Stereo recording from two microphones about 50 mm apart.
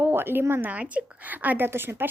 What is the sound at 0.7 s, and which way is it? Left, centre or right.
Speech, right.